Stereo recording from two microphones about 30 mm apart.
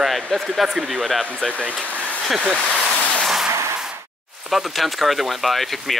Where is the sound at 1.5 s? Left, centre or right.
Right.